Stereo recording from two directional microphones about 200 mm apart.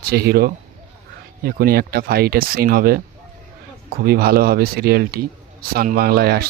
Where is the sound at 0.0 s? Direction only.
50° right (ahead or behind).